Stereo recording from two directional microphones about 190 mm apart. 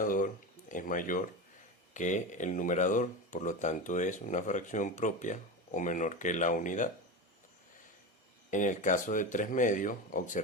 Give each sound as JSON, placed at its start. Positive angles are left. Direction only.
{"t": 0.0, "sound": "a sound", "side_deg": 45}
{"t": 0.7, "sound": "speech", "side_deg": 45}
{"t": 8.4, "sound": "speech", "side_deg": 40}